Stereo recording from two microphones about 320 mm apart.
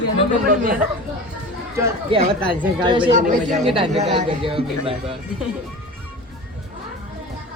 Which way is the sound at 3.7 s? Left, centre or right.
Centre.